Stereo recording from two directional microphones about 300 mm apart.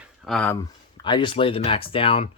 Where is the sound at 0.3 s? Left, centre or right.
Centre.